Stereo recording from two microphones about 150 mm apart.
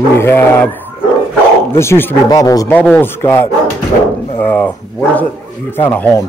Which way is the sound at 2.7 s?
10° left (ahead or behind).